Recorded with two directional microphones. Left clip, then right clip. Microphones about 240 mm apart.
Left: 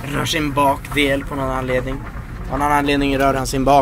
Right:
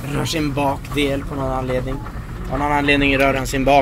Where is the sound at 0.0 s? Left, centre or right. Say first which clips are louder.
Left 2 dB; centre.